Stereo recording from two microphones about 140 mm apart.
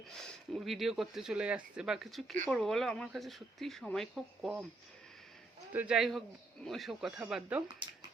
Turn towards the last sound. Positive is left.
turn(degrees=-5)  # may be behind; listen again after turning